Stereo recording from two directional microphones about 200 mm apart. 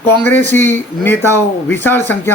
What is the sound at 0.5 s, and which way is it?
Speech, 10° left (ahead or behind).